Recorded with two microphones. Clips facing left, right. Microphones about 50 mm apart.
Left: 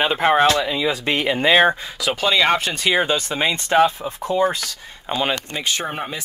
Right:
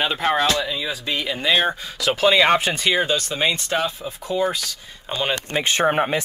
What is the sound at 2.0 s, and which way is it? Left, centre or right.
Speech, centre.